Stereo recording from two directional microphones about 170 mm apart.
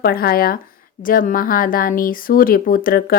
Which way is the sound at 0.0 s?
60° left (ahead or behind).